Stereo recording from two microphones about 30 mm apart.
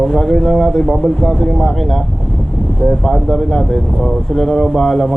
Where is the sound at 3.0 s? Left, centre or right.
Centre.